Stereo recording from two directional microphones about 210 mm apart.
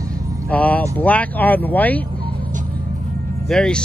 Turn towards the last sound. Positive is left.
turn(degrees=5)  # may be behind; listen again after turning